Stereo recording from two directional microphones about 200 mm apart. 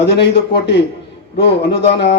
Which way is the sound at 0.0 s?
60° left (ahead or behind).